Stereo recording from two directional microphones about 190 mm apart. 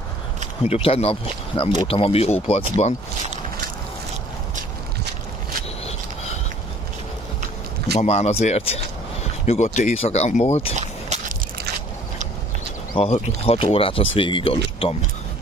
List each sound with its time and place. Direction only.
0.7 s speech: 30° left (ahead or behind)
8.0 s speech: 35° left (ahead or behind)
10.8 s a sound: 40° right (ahead or behind)
12.9 s speech: 30° left (ahead or behind)